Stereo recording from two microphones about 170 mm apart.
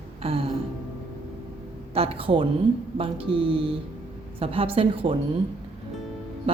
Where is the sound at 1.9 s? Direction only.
35° right (ahead or behind).